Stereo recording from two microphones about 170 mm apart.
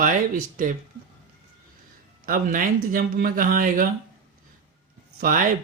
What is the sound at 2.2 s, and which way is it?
Speech, 55° right (ahead or behind).